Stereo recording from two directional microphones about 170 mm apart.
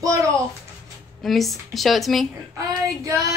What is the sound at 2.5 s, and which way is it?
Speech, 20° right (ahead or behind).